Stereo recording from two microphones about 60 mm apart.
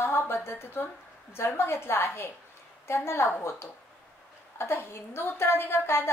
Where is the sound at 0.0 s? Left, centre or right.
Left.